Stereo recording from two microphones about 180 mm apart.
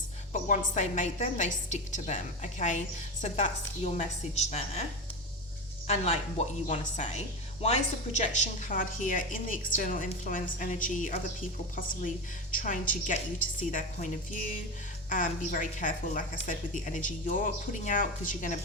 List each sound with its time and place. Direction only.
0.3 s a woman's voice: 45° left (ahead or behind)
5.9 s a woman's voice: 35° left (ahead or behind)
8.2 s a woman's voice: 40° left (ahead or behind)